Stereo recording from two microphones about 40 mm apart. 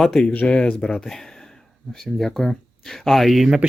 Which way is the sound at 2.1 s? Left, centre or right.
Centre.